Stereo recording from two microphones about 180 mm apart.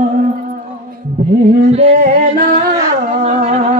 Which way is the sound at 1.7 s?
35° right (ahead or behind).